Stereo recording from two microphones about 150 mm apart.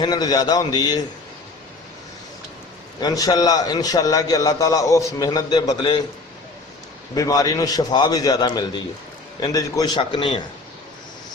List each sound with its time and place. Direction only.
0.0 s a man's voice: 25° left (ahead or behind)
3.0 s a man's voice: 25° left (ahead or behind)
7.2 s a man's voice: 25° left (ahead or behind)